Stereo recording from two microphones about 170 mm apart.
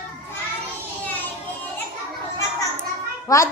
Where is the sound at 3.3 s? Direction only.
20° left (ahead or behind).